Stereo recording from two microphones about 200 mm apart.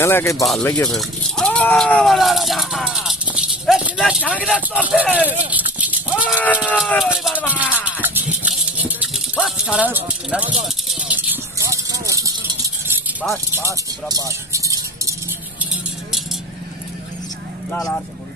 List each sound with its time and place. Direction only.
0.0 s speech: 10° left (ahead or behind)
4.7 s speech: 5° right (ahead or behind)
6.4 s speech: 5° left (ahead or behind)
7.8 s music: 10° right (ahead or behind)
9.4 s speech: 5° right (ahead or behind)
10.9 s a sound: 5° right (ahead or behind)
13.6 s music: 15° right (ahead or behind)
17.6 s speech: 5° left (ahead or behind)